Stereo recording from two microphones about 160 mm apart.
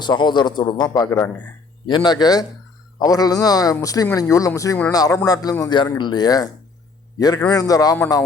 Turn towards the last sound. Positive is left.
turn(degrees=20)  # may be behind; listen again after turning